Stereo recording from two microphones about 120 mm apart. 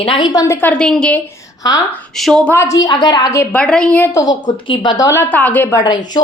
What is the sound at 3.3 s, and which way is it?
Speech, 20° left (ahead or behind).